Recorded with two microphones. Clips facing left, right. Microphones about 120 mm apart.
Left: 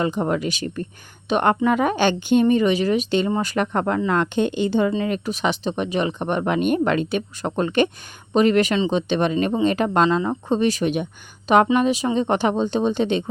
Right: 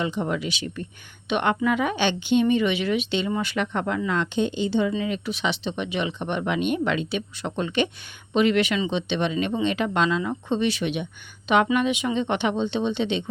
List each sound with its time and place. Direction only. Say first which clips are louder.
0.0 s a woman's voice: left 4 dB; 45° left (ahead or behind)